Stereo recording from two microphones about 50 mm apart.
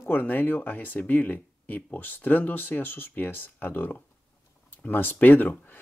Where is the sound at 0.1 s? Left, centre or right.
Left.